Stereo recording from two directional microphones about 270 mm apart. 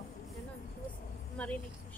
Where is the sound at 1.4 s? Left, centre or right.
Centre.